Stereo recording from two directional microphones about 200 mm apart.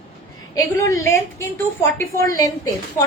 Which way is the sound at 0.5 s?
15° left (ahead or behind).